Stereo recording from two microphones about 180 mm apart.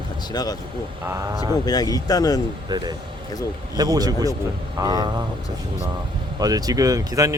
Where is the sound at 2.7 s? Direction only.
25° right (ahead or behind).